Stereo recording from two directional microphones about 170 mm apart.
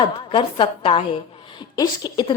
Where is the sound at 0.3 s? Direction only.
30° left (ahead or behind).